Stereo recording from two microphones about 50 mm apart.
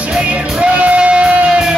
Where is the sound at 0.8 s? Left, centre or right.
Right.